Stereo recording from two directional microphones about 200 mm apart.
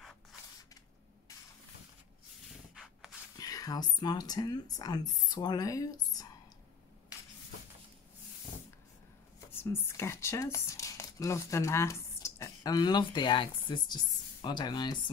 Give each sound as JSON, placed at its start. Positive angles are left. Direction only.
{"t": 2.7, "sound": "rub", "side_deg": 0}
{"t": 3.3, "sound": "speech", "side_deg": 20}
{"t": 9.5, "sound": "speech", "side_deg": 10}